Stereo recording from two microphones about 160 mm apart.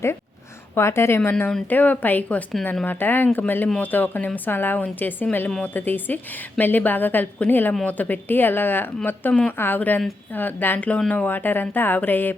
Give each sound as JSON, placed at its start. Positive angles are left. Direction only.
{"t": 0.8, "sound": "a woman's voice", "side_deg": 15}